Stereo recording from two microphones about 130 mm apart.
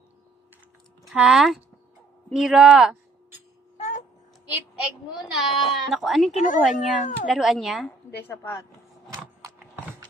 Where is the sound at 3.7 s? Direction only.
65° left (ahead or behind).